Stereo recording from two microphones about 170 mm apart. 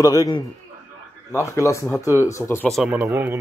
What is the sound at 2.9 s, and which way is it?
Speech, 10° right (ahead or behind).